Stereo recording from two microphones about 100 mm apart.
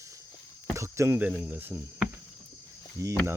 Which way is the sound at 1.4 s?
15° right (ahead or behind).